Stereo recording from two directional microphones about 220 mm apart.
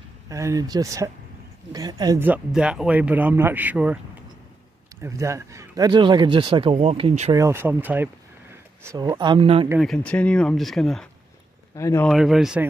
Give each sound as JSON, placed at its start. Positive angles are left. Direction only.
{"t": 0.3, "sound": "speech", "side_deg": -15}
{"t": 5.0, "sound": "speech", "side_deg": -15}
{"t": 7.3, "sound": "speech", "side_deg": -10}
{"t": 9.8, "sound": "speech", "side_deg": 5}
{"t": 11.7, "sound": "speech", "side_deg": 15}
{"t": 12.1, "sound": "speech", "side_deg": 0}